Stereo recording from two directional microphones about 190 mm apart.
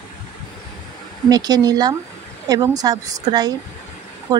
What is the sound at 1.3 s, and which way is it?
A woman's voice, 20° right (ahead or behind).